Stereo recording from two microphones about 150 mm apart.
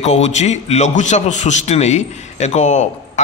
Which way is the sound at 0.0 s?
45° left (ahead or behind).